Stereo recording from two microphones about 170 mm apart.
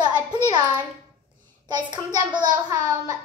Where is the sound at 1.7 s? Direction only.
25° right (ahead or behind).